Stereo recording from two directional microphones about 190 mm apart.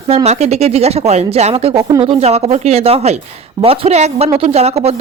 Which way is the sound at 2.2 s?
35° right (ahead or behind).